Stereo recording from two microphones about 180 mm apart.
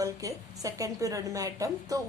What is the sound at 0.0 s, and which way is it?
Speech, 20° right (ahead or behind).